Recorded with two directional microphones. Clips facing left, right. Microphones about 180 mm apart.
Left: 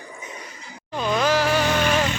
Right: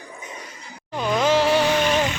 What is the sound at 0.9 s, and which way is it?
Music, 15° right (ahead or behind).